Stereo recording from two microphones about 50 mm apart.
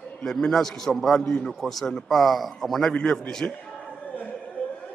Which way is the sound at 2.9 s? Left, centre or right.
Centre.